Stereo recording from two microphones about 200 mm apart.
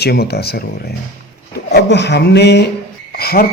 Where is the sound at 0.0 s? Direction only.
55° left (ahead or behind).